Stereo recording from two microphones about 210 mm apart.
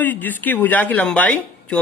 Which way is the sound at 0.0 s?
10° left (ahead or behind).